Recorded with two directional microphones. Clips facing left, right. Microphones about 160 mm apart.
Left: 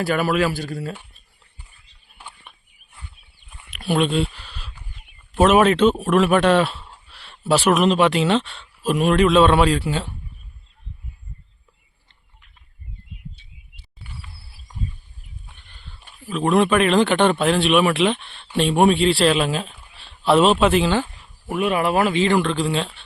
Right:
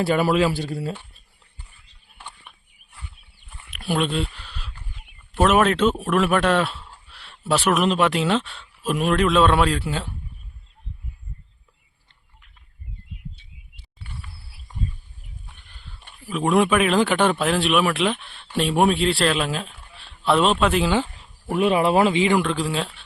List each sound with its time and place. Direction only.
0.0 s speech: 25° right (ahead or behind)
3.7 s speech: centre (ahead or behind)
14.0 s a sound: 10° left (ahead or behind)
15.7 s a sound: 5° left (ahead or behind)
16.3 s speech: 10° right (ahead or behind)
21.6 s speech: 30° right (ahead or behind)
22.1 s speech: 10° right (ahead or behind)